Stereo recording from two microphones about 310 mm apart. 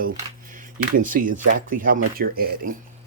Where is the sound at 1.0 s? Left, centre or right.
Right.